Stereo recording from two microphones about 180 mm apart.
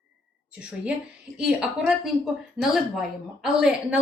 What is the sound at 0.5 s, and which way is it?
A woman's voice, 5° right (ahead or behind).